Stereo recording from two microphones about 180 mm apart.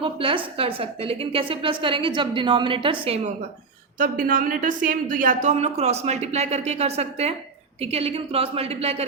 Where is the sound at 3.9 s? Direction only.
50° right (ahead or behind).